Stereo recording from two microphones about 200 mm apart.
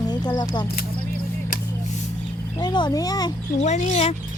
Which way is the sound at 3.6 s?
35° left (ahead or behind).